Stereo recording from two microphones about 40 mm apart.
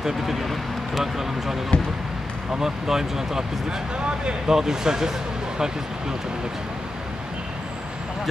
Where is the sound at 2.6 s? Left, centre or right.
Centre.